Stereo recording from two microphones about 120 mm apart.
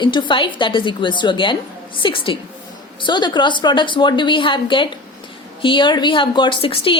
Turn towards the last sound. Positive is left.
turn(degrees=50)  # may be behind; listen again after turning